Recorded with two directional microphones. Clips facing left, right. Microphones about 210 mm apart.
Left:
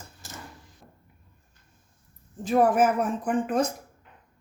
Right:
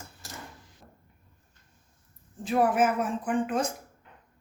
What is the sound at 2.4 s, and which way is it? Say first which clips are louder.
Speech: left 3 dB; 40° left (ahead or behind).